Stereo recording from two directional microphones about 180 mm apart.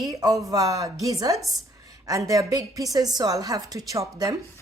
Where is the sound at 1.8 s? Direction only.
20° right (ahead or behind).